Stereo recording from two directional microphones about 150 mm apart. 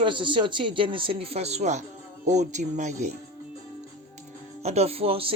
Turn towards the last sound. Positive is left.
turn(degrees=-40)  # may be behind; listen again after turning